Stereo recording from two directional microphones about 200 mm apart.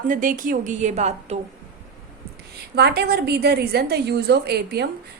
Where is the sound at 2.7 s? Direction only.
55° right (ahead or behind).